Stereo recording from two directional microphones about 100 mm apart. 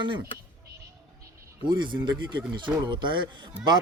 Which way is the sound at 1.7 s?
50° right (ahead or behind).